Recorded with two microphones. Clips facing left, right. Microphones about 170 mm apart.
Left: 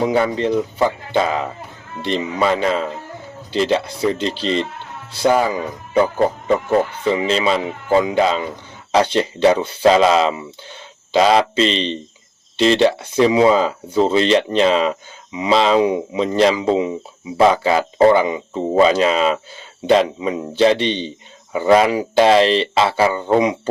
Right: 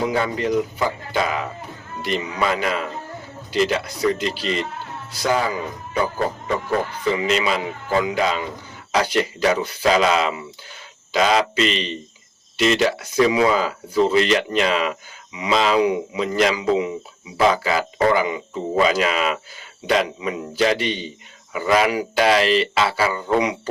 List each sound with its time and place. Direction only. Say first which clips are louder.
0.0 s speech: left 4 dB; 25° left (ahead or behind)
6.7 s speech: left 1 dB; 30° left (ahead or behind)